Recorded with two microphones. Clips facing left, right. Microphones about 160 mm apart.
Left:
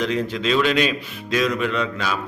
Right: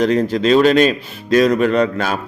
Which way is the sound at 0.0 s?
40° right (ahead or behind).